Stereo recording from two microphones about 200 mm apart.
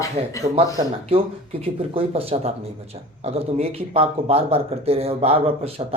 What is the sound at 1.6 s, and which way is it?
Speech, 30° right (ahead or behind).